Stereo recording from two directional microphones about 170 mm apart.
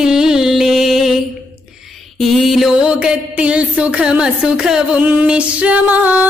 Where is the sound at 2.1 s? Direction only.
Centre (ahead or behind).